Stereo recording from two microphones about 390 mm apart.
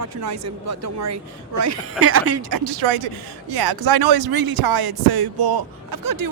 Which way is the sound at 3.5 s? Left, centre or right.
Right.